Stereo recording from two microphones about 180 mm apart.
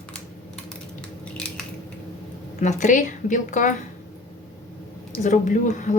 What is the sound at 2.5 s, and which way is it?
A woman's voice, 40° left (ahead or behind).